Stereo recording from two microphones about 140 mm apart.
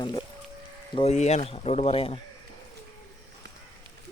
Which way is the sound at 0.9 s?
55° left (ahead or behind).